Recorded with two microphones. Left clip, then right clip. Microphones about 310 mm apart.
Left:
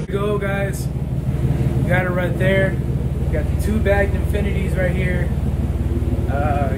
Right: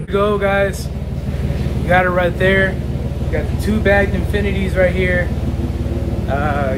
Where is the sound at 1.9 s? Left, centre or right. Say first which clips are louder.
Right 8 dB; centre.